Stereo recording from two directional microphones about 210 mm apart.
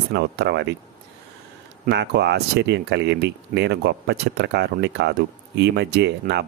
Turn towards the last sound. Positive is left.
turn(degrees=-55)  # may be behind; listen again after turning